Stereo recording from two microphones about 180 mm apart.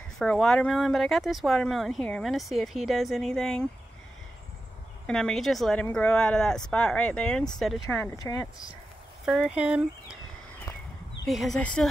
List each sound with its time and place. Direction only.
0.2 s speech: 5° left (ahead or behind)
5.0 s speech: 5° left (ahead or behind)
9.2 s speech: 5° right (ahead or behind)
11.2 s speech: centre (ahead or behind)